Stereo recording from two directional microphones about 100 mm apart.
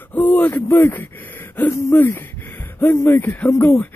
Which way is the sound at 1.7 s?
25° left (ahead or behind).